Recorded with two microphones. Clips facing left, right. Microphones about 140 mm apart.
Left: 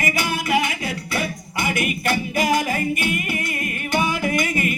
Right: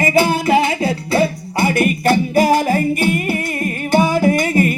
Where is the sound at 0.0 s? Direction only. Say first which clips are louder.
Right 10 dB; 30° right (ahead or behind).